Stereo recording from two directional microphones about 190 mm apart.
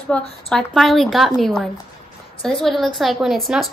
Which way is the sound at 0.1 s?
10° left (ahead or behind).